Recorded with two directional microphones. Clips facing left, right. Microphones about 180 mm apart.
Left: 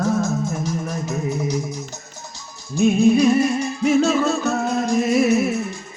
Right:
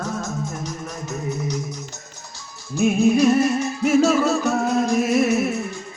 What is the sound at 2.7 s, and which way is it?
Music, 5° right (ahead or behind).